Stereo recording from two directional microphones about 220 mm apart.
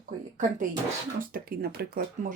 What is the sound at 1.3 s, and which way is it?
Speech, 45° right (ahead or behind).